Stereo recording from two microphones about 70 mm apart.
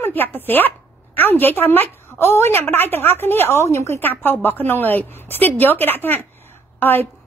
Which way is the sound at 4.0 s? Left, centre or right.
Left.